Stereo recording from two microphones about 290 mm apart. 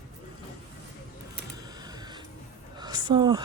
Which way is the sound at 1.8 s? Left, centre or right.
Centre.